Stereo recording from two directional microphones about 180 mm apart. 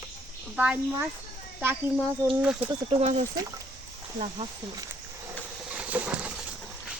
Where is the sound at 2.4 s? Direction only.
5° right (ahead or behind).